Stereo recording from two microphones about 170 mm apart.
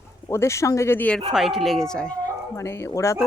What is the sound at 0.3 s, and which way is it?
Speech, 15° left (ahead or behind).